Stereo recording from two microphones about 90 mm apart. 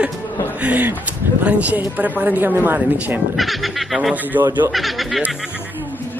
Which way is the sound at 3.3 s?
Centre (ahead or behind).